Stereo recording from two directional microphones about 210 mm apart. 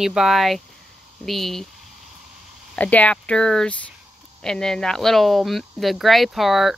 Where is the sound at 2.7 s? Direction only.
5° left (ahead or behind).